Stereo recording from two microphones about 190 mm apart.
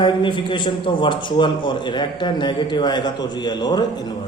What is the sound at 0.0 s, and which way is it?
A man's voice, 25° left (ahead or behind).